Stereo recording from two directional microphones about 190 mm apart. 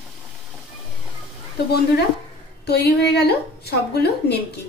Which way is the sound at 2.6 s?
60° left (ahead or behind).